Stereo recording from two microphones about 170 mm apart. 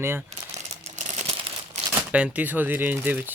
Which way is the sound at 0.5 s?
40° right (ahead or behind).